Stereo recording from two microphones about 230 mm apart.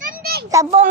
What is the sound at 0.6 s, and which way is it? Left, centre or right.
Speech, centre.